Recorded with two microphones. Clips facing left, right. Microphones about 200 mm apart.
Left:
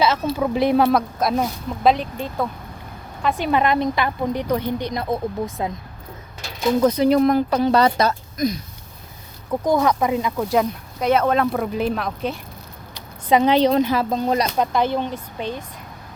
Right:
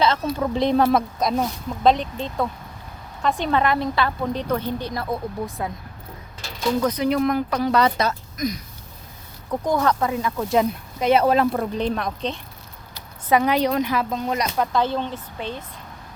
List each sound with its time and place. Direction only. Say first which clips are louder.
0.3 s a woman's voice: left 3 dB; 10° left (ahead or behind)
3.6 s a woman's voice: left 2 dB; 20° left (ahead or behind)
6.8 s speech: left 6 dB; 30° left (ahead or behind)
9.6 s a woman's voice: left 3 dB; 10° left (ahead or behind)
10.3 s speech: even; centre (ahead or behind)
12.9 s speech: left 2 dB; 20° left (ahead or behind)
14.6 s a woman's voice: left 2 dB; 15° left (ahead or behind)